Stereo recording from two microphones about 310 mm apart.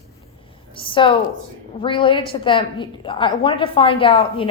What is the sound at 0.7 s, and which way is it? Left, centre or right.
A woman's voice, centre.